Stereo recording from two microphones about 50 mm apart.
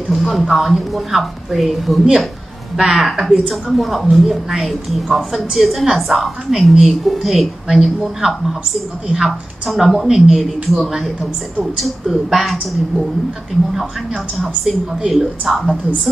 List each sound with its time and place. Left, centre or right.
0.1 s a woman's voice: centre
14.4 s a woman's voice: centre